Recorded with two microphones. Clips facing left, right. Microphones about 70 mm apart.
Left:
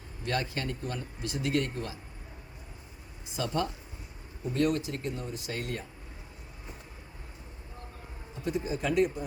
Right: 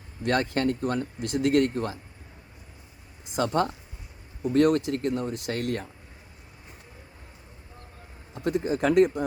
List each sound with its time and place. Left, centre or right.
0.2 s speech: right
3.3 s speech: right
4.5 s speech: right
8.4 s speech: right